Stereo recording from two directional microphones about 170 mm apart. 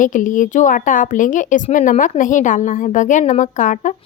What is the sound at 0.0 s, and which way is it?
A woman's voice, 50° left (ahead or behind).